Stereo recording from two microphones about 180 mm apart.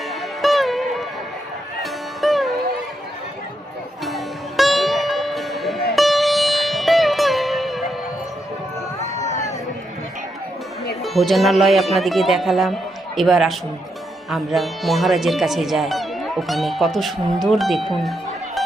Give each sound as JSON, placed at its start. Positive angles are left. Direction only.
{"t": 0.1, "sound": "music", "side_deg": 0}
{"t": 4.0, "sound": "music", "side_deg": 0}
{"t": 9.1, "sound": "a sound", "side_deg": 40}
{"t": 11.0, "sound": "speech", "side_deg": 0}